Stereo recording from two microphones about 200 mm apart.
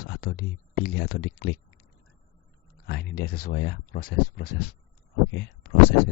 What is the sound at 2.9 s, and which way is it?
Speech, 50° left (ahead or behind).